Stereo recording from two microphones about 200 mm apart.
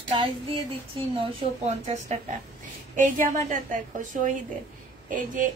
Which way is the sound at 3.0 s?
40° right (ahead or behind).